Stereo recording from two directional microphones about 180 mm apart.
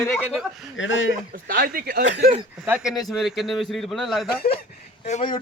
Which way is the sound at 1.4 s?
55° right (ahead or behind).